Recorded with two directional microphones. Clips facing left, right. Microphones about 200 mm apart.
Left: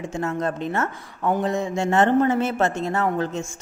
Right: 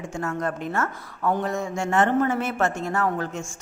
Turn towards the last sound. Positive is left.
turn(degrees=20)  # may be behind; listen again after turning